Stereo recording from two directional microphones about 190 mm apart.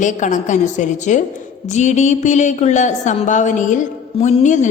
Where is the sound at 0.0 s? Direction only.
40° left (ahead or behind).